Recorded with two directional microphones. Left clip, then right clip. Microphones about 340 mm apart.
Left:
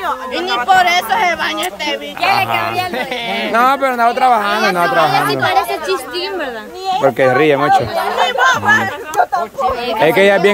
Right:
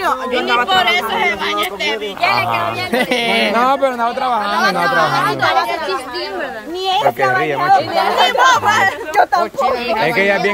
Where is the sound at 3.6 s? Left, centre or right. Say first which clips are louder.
Left 2 dB; centre.